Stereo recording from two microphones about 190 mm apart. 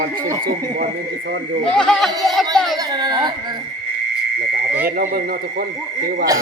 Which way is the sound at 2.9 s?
20° right (ahead or behind).